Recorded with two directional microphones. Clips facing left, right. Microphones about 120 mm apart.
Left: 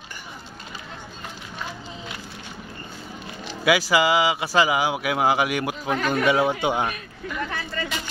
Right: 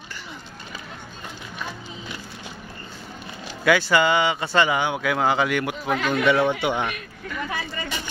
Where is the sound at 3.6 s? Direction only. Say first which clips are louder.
Right 1 dB; 10° left (ahead or behind).